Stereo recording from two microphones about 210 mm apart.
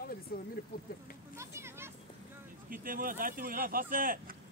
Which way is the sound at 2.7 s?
40° right (ahead or behind).